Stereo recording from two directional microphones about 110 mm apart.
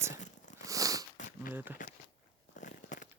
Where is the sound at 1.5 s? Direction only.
20° right (ahead or behind).